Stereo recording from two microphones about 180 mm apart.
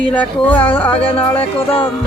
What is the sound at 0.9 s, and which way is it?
Music, 30° left (ahead or behind).